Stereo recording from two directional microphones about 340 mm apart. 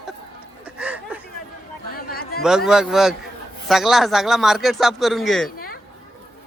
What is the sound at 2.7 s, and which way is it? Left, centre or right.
Speech, centre.